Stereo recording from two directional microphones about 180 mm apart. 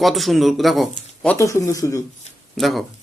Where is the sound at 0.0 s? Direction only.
Centre (ahead or behind).